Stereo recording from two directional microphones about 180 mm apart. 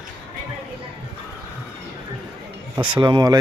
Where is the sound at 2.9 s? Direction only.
25° right (ahead or behind).